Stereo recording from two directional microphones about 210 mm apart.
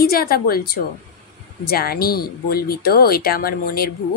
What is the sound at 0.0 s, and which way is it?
Speech, 45° left (ahead or behind).